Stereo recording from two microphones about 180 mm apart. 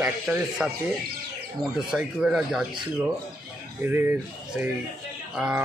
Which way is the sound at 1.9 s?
5° right (ahead or behind).